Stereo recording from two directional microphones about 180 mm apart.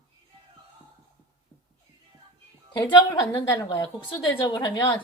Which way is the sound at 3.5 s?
20° left (ahead or behind).